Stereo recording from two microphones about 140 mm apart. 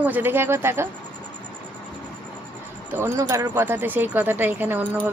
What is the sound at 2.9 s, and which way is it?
Speech, 20° right (ahead or behind).